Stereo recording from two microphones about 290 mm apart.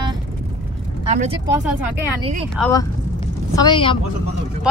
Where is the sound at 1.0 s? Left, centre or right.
Right.